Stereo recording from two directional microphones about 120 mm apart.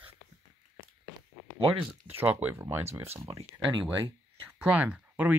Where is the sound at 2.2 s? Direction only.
15° right (ahead or behind).